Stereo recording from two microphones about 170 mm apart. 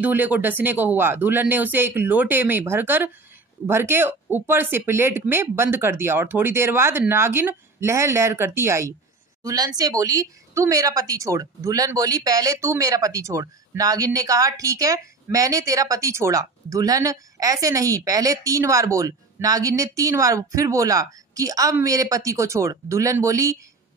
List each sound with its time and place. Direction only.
0.0 s speech: 10° right (ahead or behind)